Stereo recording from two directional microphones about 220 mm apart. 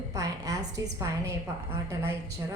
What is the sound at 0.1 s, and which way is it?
A woman's voice, 15° right (ahead or behind).